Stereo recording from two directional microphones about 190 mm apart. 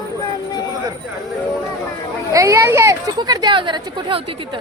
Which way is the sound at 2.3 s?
15° right (ahead or behind).